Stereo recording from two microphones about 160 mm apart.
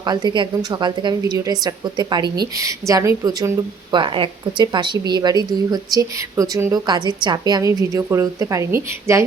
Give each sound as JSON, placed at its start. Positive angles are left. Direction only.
{"t": 0.0, "sound": "a woman's voice", "side_deg": -25}